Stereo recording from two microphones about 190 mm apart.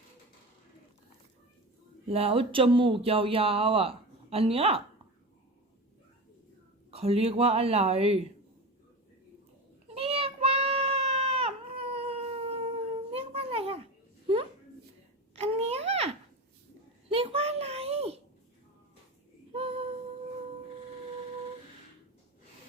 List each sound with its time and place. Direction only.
2.0 s speech: 30° right (ahead or behind)
6.9 s speech: 30° right (ahead or behind)
9.9 s child singing: 30° right (ahead or behind)
13.1 s a sound: 30° right (ahead or behind)
15.4 s a sound: 30° right (ahead or behind)
19.5 s female singing: 30° right (ahead or behind)